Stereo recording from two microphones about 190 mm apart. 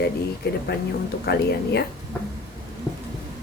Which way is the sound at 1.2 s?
60° left (ahead or behind).